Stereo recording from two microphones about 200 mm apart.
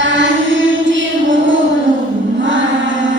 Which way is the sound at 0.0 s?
65° right (ahead or behind).